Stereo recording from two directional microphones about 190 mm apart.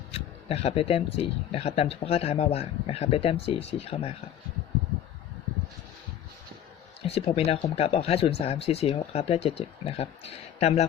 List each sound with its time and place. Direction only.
0.1 s speech: 30° left (ahead or behind)
7.0 s speech: 30° left (ahead or behind)